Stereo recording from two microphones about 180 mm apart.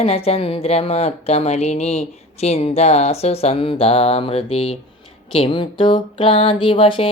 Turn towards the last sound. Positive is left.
turn(degrees=30)  # may be behind; listen again after turning